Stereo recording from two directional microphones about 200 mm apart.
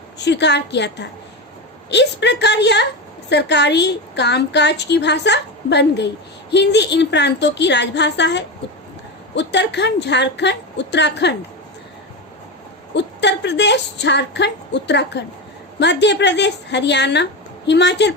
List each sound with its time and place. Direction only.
0.3 s a woman's voice: 60° left (ahead or behind)
12.9 s a woman's voice: 60° left (ahead or behind)